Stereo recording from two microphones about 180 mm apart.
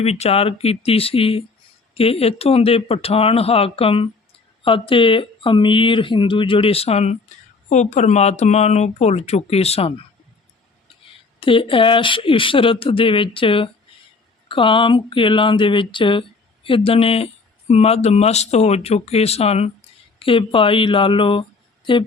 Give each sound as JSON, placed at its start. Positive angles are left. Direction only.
{"t": 0.0, "sound": "speech", "side_deg": 35}
{"t": 11.3, "sound": "speech", "side_deg": 30}